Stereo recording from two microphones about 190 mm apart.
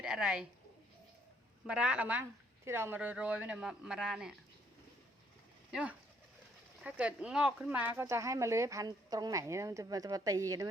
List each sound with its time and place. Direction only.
0.0 s speech: 5° right (ahead or behind)
1.6 s speech: 5° right (ahead or behind)
5.7 s speech: 5° right (ahead or behind)